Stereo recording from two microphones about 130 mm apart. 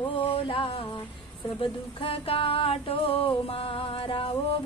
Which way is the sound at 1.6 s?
45° left (ahead or behind).